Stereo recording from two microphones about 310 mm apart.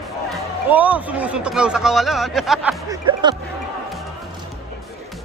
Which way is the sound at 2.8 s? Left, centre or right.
Centre.